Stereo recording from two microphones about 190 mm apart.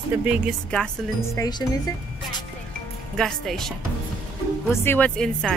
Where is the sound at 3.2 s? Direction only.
Centre (ahead or behind).